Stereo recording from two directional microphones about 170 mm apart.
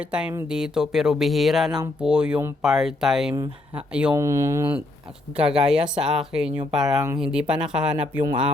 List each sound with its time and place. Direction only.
0.0 s speech: 5° right (ahead or behind)
4.1 s speech: 15° right (ahead or behind)
5.4 s speech: 5° right (ahead or behind)